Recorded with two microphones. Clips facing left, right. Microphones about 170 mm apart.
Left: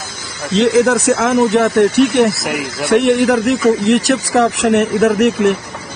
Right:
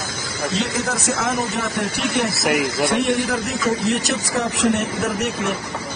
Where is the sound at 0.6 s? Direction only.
80° left.